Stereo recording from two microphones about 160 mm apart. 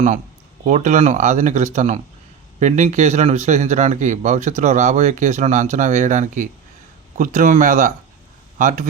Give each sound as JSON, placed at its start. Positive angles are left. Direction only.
{"t": 0.6, "sound": "speech", "side_deg": -50}